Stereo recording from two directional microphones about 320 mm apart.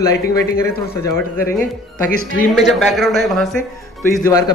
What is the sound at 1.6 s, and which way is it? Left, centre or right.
Speech, left.